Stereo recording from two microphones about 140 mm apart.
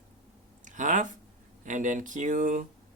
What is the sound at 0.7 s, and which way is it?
Speech, 60° right (ahead or behind).